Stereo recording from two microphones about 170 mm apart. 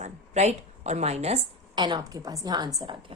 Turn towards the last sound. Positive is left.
turn(degrees=-30)  # may be behind; listen again after turning